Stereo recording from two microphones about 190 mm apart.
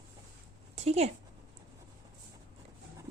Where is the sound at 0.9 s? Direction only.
35° right (ahead or behind).